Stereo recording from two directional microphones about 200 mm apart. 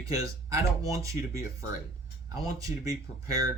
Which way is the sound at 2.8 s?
15° right (ahead or behind).